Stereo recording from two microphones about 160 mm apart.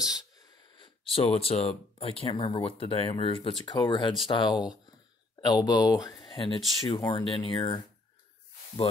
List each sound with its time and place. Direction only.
0.1 s speech: 25° left (ahead or behind)